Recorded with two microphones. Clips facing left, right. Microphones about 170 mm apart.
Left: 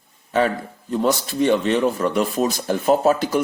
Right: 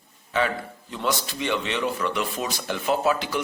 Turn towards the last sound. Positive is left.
turn(degrees=45)  # may be behind; listen again after turning